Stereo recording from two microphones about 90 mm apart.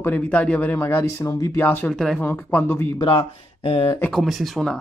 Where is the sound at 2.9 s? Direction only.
75° left (ahead or behind); by 3.9 s 90° left.